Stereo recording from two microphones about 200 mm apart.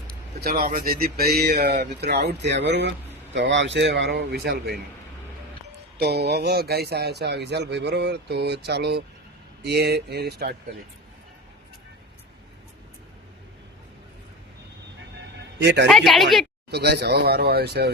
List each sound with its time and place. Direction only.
0.4 s a man's voice: 45° right (ahead or behind)
6.0 s a man's voice: 55° right (ahead or behind)
15.6 s a man's voice: 60° right (ahead or behind)
15.9 s speech: centre (ahead or behind)
16.7 s speech: 55° right (ahead or behind)